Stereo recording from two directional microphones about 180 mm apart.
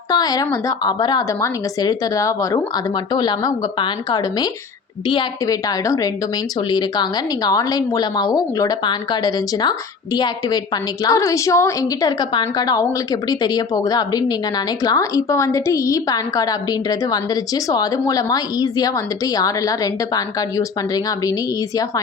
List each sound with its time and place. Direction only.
0.1 s a woman's voice: 20° left (ahead or behind)